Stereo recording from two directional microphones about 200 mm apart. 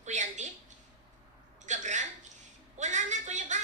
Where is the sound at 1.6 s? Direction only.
35° right (ahead or behind).